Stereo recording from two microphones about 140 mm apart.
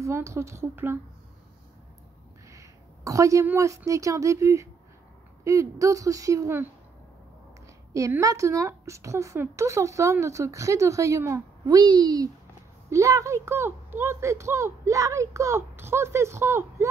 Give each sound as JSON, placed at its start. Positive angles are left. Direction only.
{"t": 0.0, "sound": "speech", "side_deg": -20}
{"t": 2.5, "sound": "a woman's voice", "side_deg": -25}
{"t": 8.2, "sound": "speech", "side_deg": -25}